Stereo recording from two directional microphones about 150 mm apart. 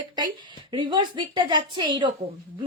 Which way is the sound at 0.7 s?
30° right (ahead or behind).